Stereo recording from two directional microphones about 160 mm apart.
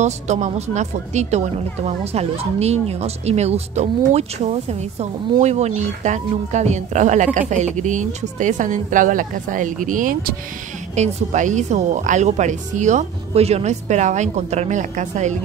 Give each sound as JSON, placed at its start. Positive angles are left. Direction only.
{"t": 0.0, "sound": "speech", "side_deg": -45}